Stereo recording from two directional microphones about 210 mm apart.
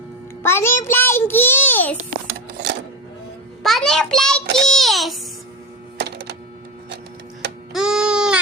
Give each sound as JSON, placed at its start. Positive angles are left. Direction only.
{"t": 0.4, "sound": "a child's voice", "side_deg": 10}
{"t": 3.6, "sound": "child singing", "side_deg": 0}
{"t": 6.0, "sound": "music", "side_deg": -50}
{"t": 7.7, "sound": "a sound", "side_deg": 0}